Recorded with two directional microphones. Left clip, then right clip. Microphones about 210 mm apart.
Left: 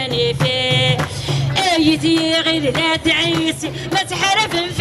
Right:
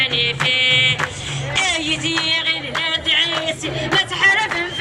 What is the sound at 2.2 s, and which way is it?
Music, 50° left (ahead or behind).